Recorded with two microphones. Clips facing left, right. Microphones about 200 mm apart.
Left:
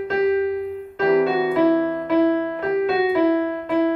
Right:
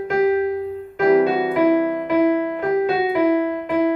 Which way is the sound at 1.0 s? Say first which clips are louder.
Right 2 dB; 15° right (ahead or behind).